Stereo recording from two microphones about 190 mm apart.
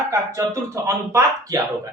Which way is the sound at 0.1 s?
15° right (ahead or behind).